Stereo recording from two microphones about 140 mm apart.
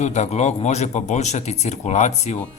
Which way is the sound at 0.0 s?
55° left (ahead or behind).